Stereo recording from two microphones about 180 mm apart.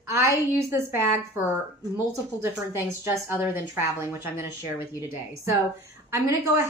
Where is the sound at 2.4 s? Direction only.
15° right (ahead or behind).